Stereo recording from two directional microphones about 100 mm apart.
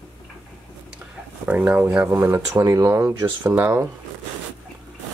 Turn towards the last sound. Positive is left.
turn(degrees=-25)  # may be behind; listen again after turning